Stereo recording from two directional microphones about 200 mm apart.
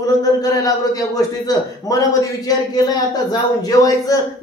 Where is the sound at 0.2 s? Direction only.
20° left (ahead or behind).